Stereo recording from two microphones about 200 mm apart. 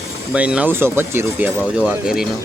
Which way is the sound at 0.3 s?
5° right (ahead or behind).